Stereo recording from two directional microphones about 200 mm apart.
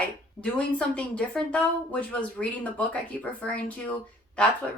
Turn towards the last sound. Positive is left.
turn(degrees=5)  # may be behind; listen again after turning